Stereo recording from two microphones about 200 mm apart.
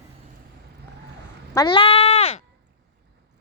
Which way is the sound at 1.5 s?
20° left (ahead or behind).